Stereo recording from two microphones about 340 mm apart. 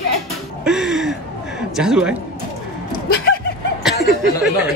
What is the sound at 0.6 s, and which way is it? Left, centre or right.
Speech, centre.